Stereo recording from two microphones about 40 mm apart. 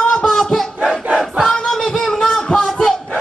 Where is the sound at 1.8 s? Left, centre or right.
Centre.